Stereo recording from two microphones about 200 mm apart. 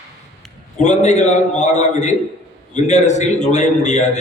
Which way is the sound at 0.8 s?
35° left (ahead or behind).